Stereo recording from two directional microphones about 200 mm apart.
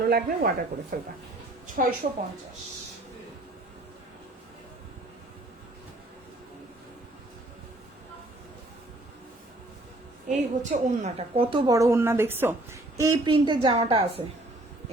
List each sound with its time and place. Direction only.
0.0 s a woman's voice: 45° right (ahead or behind)
10.2 s a woman's voice: 35° right (ahead or behind)